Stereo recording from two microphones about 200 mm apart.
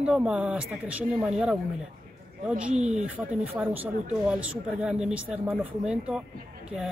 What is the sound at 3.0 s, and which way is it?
Speech, 5° right (ahead or behind).